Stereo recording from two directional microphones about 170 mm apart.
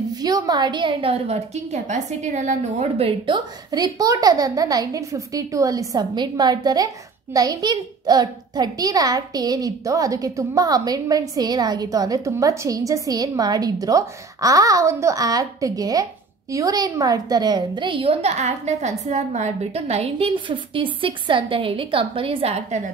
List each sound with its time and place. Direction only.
0.1 s a child's voice: 25° right (ahead or behind)